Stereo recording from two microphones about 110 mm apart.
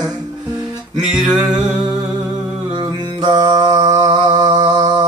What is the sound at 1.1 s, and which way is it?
Music, 5° right (ahead or behind).